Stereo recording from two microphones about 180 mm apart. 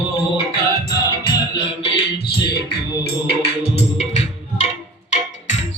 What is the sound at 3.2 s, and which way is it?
Music, 35° left (ahead or behind).